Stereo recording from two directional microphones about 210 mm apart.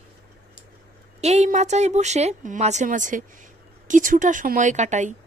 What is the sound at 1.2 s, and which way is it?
Speech, 30° right (ahead or behind).